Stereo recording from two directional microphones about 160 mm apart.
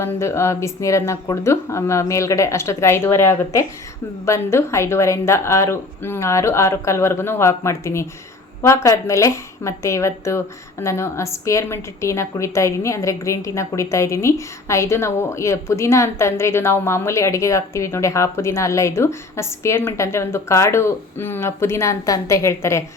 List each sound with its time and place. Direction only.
0.0 s a woman's voice: 15° left (ahead or behind)